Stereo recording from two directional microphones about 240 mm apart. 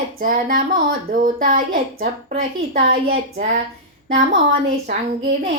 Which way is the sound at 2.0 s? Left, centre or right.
Right.